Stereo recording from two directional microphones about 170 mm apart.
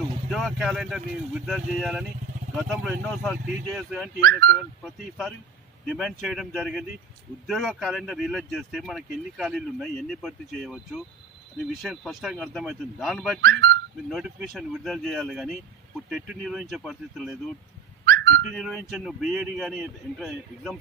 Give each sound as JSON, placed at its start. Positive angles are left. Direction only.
{"t": 0.3, "sound": "speech", "side_deg": 0}
{"t": 13.4, "sound": "speech", "side_deg": -70}
{"t": 14.1, "sound": "speech", "side_deg": 0}
{"t": 18.0, "sound": "a sound", "side_deg": -70}
{"t": 18.5, "sound": "speech", "side_deg": 0}